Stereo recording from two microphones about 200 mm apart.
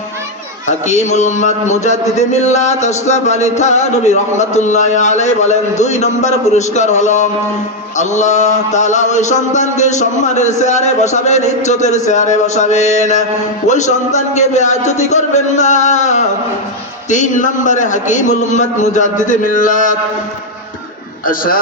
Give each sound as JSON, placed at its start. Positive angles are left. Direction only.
{"t": 0.7, "sound": "a man's voice", "side_deg": 35}
{"t": 21.2, "sound": "a man's voice", "side_deg": 45}